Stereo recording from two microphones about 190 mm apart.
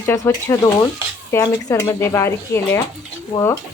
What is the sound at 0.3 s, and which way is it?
Speech, 15° left (ahead or behind).